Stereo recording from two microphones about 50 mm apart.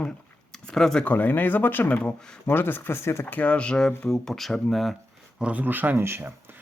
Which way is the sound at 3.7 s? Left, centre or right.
Centre.